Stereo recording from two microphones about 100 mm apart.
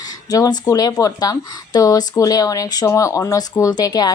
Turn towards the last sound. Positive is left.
turn(degrees=40)  # may be behind; listen again after turning